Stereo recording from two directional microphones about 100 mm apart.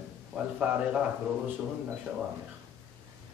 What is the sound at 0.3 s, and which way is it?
Speech, 10° right (ahead or behind).